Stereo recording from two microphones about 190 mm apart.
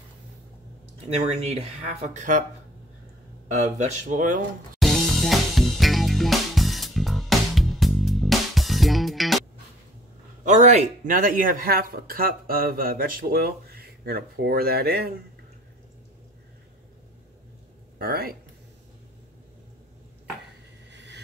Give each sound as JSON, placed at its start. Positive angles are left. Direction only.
{"t": 1.0, "sound": "speech", "side_deg": -35}
{"t": 3.7, "sound": "speech", "side_deg": -40}
{"t": 4.7, "sound": "music", "side_deg": 0}
{"t": 10.4, "sound": "speech", "side_deg": -40}
{"t": 17.9, "sound": "speech", "side_deg": -55}
{"t": 20.9, "sound": "vehicle", "side_deg": -70}